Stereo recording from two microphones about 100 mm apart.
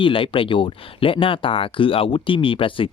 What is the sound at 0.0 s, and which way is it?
Speech, 60° left (ahead or behind).